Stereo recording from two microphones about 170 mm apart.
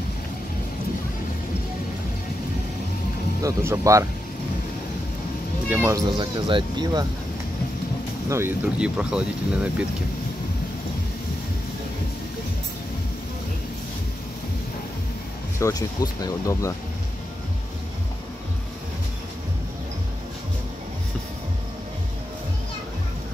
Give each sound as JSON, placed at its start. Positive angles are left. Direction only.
{"t": 3.4, "sound": "speech", "side_deg": -20}
{"t": 5.7, "sound": "speech", "side_deg": -15}
{"t": 6.1, "sound": "speech", "side_deg": -30}
{"t": 8.3, "sound": "speech", "side_deg": -15}
{"t": 15.6, "sound": "speech", "side_deg": 20}